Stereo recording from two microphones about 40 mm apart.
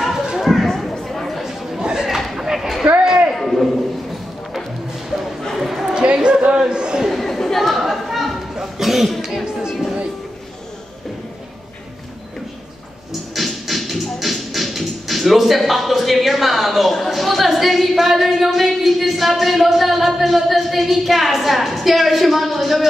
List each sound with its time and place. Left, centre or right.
0.4 s a sound: centre
1.0 s chatter: centre
1.4 s chatter: centre
1.8 s chatter: centre
2.0 s chatter: centre
3.5 s a sound: centre
5.6 s chatter: centre
6.1 s a sound: right
7.1 s chatter: centre
13.3 s music: centre